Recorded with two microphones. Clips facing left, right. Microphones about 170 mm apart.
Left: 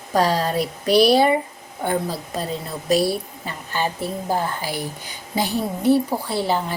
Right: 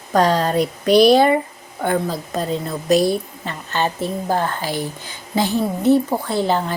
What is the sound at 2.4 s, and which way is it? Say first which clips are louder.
Speech: right 7 dB; 45° right (ahead or behind).